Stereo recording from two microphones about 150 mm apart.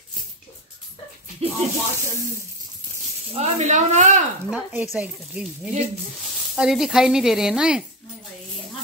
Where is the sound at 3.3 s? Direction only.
45° right (ahead or behind).